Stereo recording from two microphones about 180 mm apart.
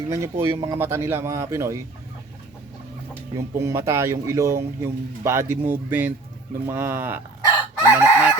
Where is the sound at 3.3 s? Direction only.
15° right (ahead or behind).